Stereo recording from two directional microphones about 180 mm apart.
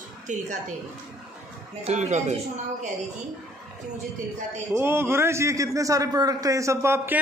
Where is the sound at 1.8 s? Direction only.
40° right (ahead or behind).